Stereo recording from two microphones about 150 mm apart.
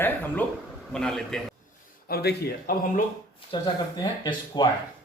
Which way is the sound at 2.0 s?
90° left.